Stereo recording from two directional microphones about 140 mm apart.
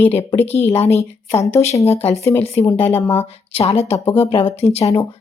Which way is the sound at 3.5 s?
45° left (ahead or behind).